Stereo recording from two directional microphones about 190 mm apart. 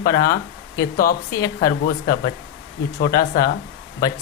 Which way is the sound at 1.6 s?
55° left (ahead or behind).